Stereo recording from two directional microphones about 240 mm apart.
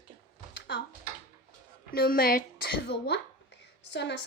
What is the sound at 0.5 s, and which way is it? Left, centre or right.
Typing, left.